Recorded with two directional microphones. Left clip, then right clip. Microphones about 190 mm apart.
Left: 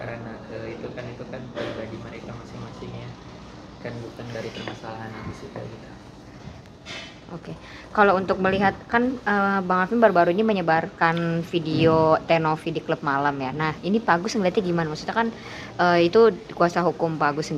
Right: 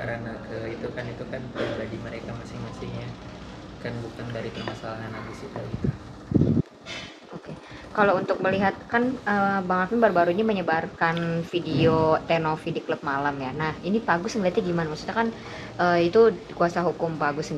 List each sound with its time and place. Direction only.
7.9 s speech: 55° left (ahead or behind)
15.8 s speech: 45° left (ahead or behind)